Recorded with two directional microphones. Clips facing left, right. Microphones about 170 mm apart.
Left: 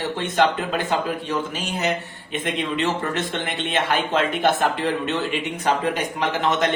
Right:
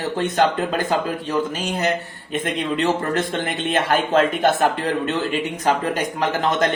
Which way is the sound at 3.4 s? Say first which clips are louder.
Right 2 dB; 45° right (ahead or behind).